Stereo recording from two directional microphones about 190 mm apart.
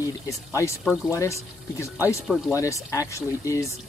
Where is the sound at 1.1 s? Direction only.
15° left (ahead or behind).